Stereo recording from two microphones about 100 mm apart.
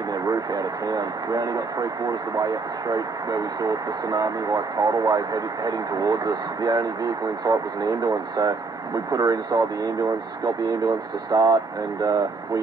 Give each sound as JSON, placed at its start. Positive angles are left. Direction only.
{"t": 0.1, "sound": "speech", "side_deg": -40}